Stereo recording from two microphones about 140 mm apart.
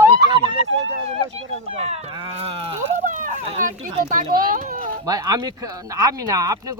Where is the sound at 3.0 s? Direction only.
65° right (ahead or behind).